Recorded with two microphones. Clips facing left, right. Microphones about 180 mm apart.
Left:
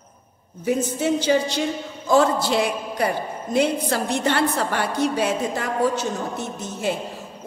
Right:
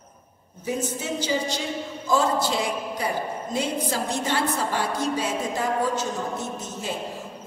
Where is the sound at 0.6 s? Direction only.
65° left (ahead or behind).